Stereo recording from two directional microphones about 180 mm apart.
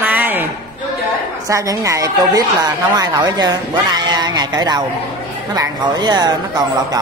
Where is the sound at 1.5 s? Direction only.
20° right (ahead or behind).